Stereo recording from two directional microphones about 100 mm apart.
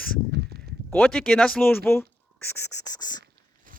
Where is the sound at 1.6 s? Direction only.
20° left (ahead or behind).